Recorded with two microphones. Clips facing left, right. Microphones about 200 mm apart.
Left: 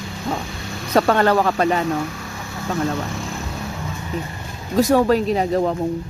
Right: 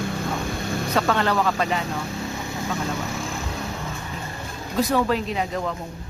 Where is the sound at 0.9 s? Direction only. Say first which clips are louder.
Left 7 dB; 45° left (ahead or behind).